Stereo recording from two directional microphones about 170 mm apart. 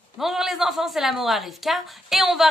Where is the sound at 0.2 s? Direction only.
Centre (ahead or behind).